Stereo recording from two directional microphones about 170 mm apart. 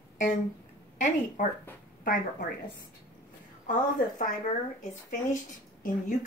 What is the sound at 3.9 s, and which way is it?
Speech, 50° left (ahead or behind).